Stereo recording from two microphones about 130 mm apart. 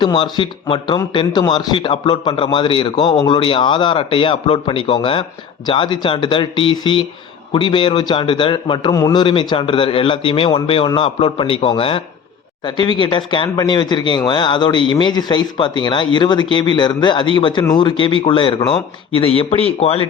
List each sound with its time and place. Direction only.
0.0 s a man's voice: 35° left (ahead or behind)
9.2 s a man's voice: 40° left (ahead or behind)